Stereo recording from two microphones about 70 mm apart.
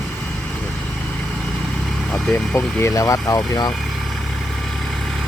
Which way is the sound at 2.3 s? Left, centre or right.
Left.